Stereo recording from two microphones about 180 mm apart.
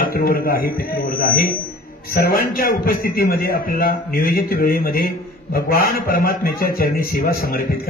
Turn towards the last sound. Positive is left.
turn(degrees=55)  # may be behind; listen again after turning